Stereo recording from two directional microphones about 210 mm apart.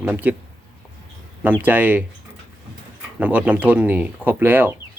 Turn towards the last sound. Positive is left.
turn(degrees=-10)  # may be behind; listen again after turning